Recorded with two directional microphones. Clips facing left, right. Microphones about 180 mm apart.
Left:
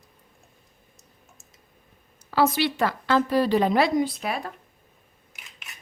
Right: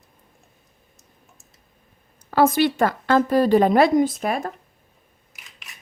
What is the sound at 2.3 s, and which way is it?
A woman's voice, 50° right (ahead or behind).